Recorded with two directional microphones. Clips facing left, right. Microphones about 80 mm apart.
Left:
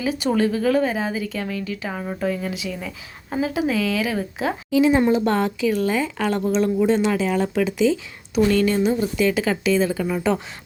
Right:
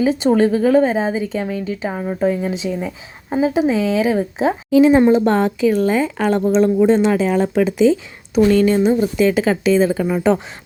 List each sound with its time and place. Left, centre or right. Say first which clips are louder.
0.0 s a woman's voice: right 6 dB; right